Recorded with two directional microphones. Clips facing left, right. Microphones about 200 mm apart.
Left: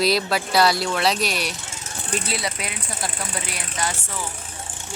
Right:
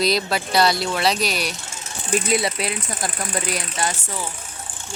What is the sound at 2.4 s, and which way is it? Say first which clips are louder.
Speech: right 5 dB; 30° right (ahead or behind).